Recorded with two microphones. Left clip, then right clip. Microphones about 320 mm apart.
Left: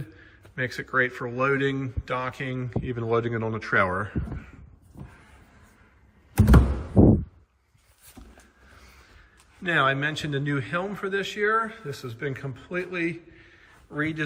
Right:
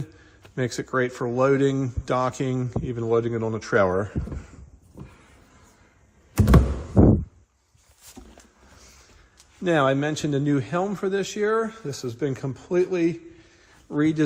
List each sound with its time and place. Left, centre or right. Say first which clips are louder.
0.5 s a man's voice: even; centre
6.9 s a sound: right 1 dB; centre
9.6 s a man's voice: right 2 dB; centre